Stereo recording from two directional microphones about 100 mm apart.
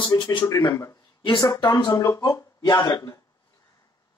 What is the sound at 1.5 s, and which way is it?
Speech, 40° left (ahead or behind).